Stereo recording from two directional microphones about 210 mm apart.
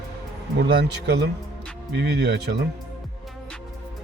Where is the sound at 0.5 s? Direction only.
55° right (ahead or behind).